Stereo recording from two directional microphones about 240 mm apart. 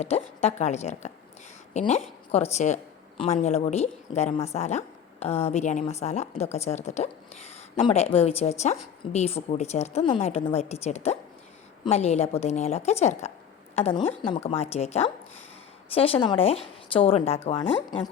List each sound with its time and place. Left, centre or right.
0.4 s a woman's voice: left